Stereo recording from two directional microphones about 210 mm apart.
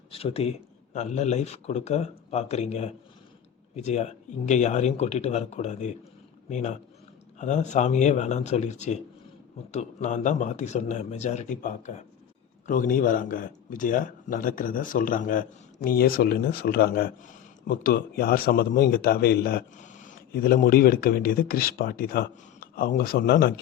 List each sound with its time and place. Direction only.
0.1 s a man's voice: 25° left (ahead or behind); by 23.6 s 50° left (ahead or behind)